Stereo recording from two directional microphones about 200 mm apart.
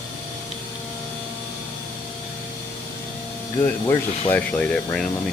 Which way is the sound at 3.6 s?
15° left (ahead or behind).